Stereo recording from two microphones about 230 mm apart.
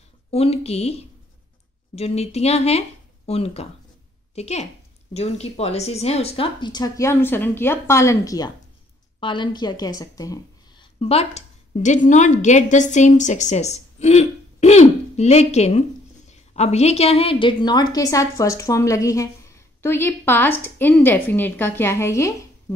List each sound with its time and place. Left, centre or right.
0.3 s a woman's voice: left